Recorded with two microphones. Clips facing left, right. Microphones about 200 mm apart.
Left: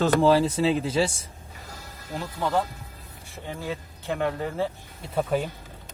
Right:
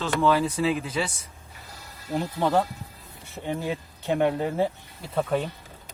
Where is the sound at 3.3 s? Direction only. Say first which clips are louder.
Right 4 dB; 20° right (ahead or behind).